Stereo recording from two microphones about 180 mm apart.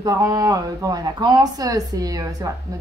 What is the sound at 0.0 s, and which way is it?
Speech, 20° right (ahead or behind).